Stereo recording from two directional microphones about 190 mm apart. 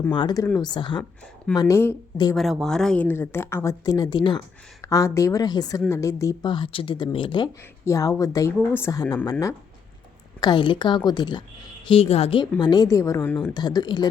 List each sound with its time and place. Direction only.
0.1 s a woman's voice: 25° left (ahead or behind)
2.3 s speech: centre (ahead or behind); by 9.1 s 20° left (ahead or behind)
10.4 s a woman's voice: 25° left (ahead or behind); by 13.5 s 10° left (ahead or behind)
13.5 s a woman's voice: 20° left (ahead or behind)